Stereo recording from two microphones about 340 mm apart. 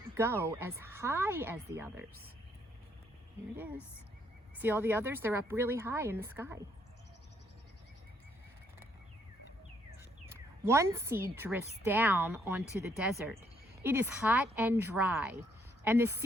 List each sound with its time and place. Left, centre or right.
0.1 s speech: centre
3.5 s speech: centre
10.2 s a woman's voice: centre